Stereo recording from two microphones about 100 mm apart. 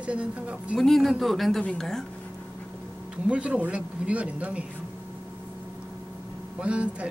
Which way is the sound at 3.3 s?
10° right (ahead or behind).